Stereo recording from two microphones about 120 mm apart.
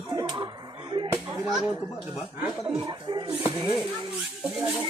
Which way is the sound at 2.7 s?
40° right (ahead or behind).